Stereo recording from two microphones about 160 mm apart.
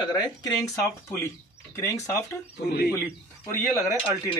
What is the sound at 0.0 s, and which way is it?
Speech, 25° left (ahead or behind).